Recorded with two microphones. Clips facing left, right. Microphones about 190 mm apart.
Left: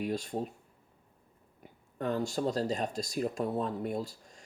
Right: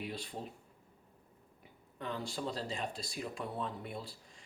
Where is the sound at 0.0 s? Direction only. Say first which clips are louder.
Left 9 dB; 45° left (ahead or behind).